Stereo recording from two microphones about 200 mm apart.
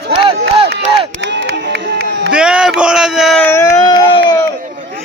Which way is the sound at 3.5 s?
15° left (ahead or behind).